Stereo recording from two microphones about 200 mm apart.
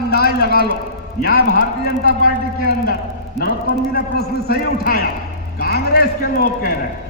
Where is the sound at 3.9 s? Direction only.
50° left (ahead or behind).